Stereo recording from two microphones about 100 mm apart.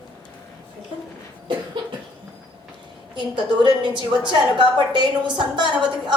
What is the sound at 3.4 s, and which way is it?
A woman's voice, 50° right (ahead or behind).